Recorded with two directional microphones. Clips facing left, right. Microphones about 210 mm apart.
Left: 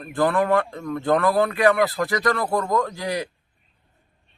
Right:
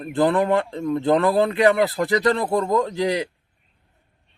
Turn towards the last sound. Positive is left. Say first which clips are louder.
# right 3 dB
turn(degrees=-20)  # may be behind; listen again after turning